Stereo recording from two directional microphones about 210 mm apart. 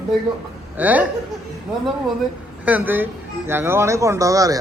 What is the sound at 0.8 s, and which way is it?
Speech, 5° right (ahead or behind).